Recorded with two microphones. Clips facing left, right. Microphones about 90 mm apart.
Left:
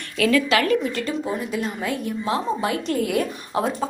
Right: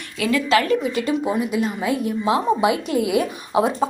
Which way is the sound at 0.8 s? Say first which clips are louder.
Right 4 dB; 10° right (ahead or behind).